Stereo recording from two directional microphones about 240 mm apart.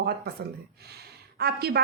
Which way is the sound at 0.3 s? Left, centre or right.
Right.